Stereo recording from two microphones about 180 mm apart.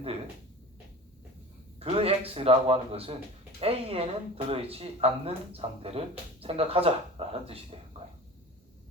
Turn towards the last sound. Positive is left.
turn(degrees=-35)  # may be behind; listen again after turning